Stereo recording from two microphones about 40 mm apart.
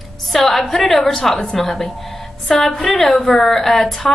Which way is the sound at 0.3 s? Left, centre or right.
Centre.